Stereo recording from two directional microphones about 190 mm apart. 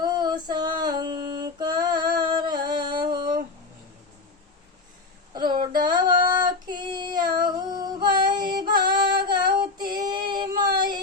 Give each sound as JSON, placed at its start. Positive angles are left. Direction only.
{"t": 0.0, "sound": "female singing", "side_deg": -20}
{"t": 5.3, "sound": "a sound", "side_deg": -25}
{"t": 6.9, "sound": "child singing", "side_deg": -20}
{"t": 8.6, "sound": "music", "side_deg": -25}
{"t": 9.0, "sound": "female singing", "side_deg": -25}
{"t": 10.1, "sound": "child singing", "side_deg": -25}